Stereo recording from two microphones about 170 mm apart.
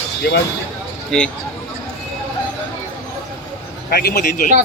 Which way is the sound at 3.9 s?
50° left (ahead or behind).